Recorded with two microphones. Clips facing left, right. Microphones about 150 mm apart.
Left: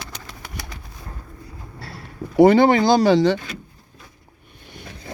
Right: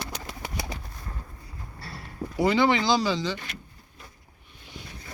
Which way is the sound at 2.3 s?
55° left (ahead or behind).